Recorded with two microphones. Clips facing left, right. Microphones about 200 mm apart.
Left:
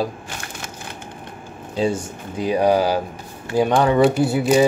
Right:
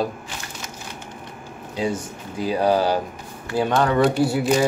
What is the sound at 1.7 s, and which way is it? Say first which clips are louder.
Speech: left 4 dB; 30° left (ahead or behind).